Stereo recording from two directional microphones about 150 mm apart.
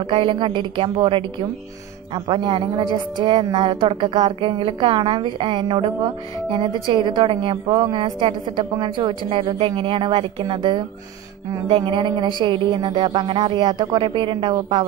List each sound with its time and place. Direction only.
0.1 s a woman's voice: 35° right (ahead or behind)